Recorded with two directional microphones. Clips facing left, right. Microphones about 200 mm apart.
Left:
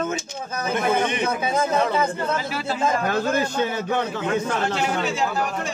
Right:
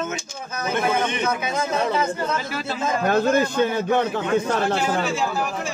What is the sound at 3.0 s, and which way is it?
Speech, 55° right (ahead or behind).